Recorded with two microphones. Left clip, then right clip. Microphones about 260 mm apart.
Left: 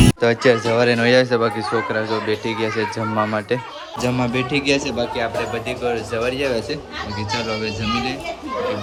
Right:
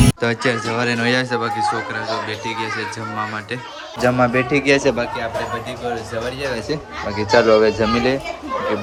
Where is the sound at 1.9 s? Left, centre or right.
Centre.